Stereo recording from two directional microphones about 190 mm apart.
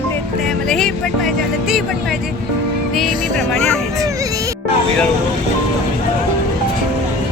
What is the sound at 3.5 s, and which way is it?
Speech, 5° left (ahead or behind).